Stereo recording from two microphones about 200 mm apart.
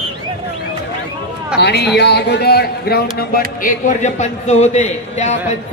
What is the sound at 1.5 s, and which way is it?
A man's voice, 55° left (ahead or behind).